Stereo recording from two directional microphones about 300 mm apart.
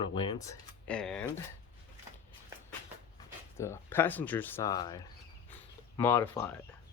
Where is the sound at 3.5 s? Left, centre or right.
Centre.